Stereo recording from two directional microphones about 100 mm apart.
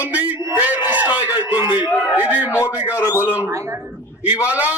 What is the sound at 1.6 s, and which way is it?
Speech, 45° left (ahead or behind).